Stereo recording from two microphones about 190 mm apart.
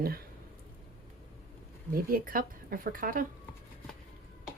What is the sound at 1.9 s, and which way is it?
Speech, 50° right (ahead or behind).